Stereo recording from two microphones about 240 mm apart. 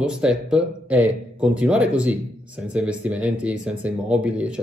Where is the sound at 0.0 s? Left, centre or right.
Centre.